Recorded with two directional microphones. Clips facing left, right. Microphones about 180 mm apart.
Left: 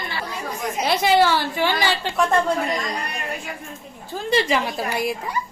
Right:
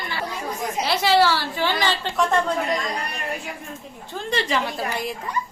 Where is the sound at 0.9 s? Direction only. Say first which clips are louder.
Left 1 dB; 20° left (ahead or behind).